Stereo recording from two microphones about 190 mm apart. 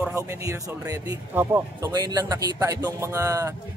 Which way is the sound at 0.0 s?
15° right (ahead or behind).